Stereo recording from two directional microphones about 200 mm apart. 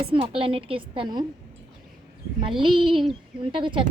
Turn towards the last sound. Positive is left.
turn(degrees=-25)  # may be behind; listen again after turning